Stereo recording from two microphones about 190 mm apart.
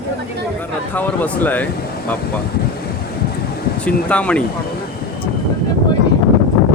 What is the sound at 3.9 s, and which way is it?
Speech, 5° left (ahead or behind).